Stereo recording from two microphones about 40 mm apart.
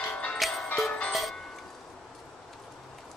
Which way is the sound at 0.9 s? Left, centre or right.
Left.